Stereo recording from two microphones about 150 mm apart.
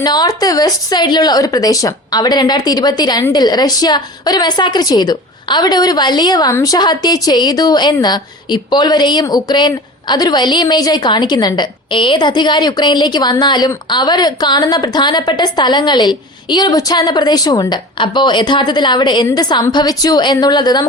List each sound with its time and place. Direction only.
0.0 s a woman's voice: 25° left (ahead or behind)